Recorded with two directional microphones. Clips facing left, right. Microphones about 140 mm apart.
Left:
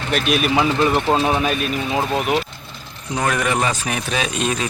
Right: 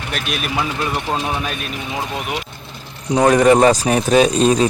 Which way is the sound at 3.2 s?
35° right (ahead or behind).